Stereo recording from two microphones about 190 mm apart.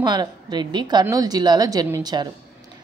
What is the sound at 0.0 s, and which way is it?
A woman's voice, 20° right (ahead or behind).